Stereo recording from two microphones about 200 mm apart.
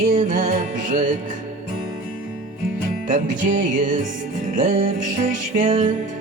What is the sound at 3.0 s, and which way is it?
Music, 40° right (ahead or behind).